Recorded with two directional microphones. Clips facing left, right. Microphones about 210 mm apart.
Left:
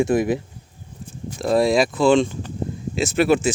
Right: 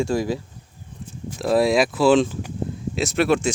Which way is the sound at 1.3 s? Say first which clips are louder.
Left 1 dB; centre (ahead or behind).